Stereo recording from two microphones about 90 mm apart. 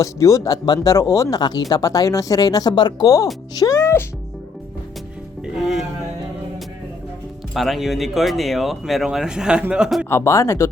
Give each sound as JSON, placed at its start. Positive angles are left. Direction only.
{"t": 0.0, "sound": "speech", "side_deg": 35}
{"t": 1.4, "sound": "speech", "side_deg": 50}
{"t": 3.6, "sound": "speech", "side_deg": 35}
{"t": 5.5, "sound": "speech", "side_deg": -5}
{"t": 7.5, "sound": "speech", "side_deg": 0}
{"t": 10.1, "sound": "speech", "side_deg": 30}